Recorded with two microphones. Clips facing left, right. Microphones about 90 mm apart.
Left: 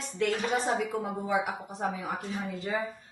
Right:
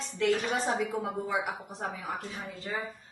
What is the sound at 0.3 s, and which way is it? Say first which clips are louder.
Speech: right 4 dB; 15° left (ahead or behind).